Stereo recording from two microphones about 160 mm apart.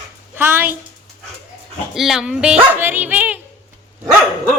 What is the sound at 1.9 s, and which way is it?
Speech, centre (ahead or behind).